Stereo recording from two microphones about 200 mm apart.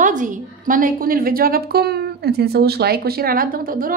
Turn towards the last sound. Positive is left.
turn(degrees=-45)  # may be behind; listen again after turning